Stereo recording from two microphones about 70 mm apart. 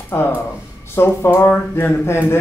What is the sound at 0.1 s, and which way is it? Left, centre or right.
Speech, left.